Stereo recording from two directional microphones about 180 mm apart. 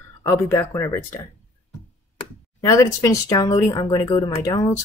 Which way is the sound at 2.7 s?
15° left (ahead or behind).